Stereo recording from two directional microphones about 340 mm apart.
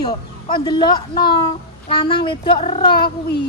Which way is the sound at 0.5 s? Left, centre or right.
Centre.